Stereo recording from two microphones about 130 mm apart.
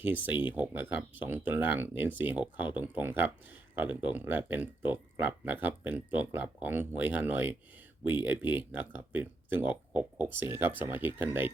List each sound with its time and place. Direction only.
0.0 s speech: 15° right (ahead or behind)